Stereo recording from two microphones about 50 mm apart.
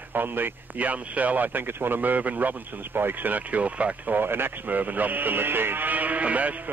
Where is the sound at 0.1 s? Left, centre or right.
Right.